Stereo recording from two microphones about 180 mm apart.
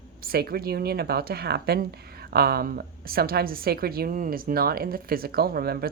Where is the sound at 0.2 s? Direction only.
55° right (ahead or behind).